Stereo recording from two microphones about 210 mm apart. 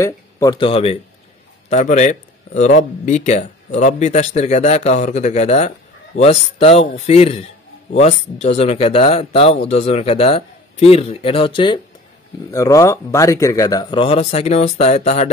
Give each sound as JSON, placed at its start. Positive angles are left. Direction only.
{"t": 0.0, "sound": "a man's voice", "side_deg": 15}